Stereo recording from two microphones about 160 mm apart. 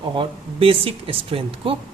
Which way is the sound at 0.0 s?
30° right (ahead or behind).